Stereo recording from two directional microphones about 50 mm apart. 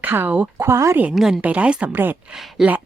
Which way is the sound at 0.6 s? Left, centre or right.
Right.